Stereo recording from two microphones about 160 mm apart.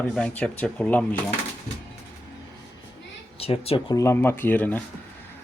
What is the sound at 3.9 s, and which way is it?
Speech, 20° left (ahead or behind).